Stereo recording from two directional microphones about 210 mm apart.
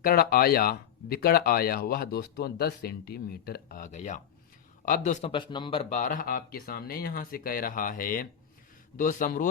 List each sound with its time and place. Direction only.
0.0 s speech: 45° left (ahead or behind)
5.3 s speech: 20° left (ahead or behind); by 9.5 s 40° left (ahead or behind)